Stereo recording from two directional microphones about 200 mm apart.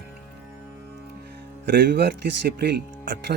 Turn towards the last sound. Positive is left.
turn(degrees=-55)  # may be behind; listen again after turning